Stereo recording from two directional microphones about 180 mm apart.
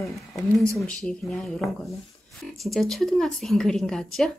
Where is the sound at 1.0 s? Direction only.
5° left (ahead or behind).